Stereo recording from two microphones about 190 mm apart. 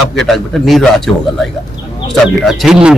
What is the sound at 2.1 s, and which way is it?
Speech, centre (ahead or behind).